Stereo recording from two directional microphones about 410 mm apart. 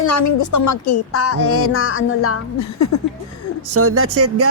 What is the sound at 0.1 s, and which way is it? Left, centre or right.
Speech, left.